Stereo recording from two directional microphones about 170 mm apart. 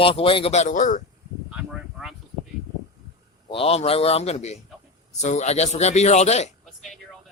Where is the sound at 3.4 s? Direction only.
35° left (ahead or behind).